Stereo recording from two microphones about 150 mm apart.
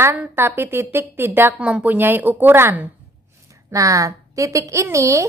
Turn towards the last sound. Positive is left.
turn(degrees=-20)  # may be behind; listen again after turning